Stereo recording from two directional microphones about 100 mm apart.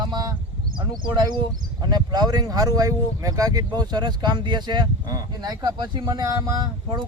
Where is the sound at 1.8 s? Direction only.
45° right (ahead or behind).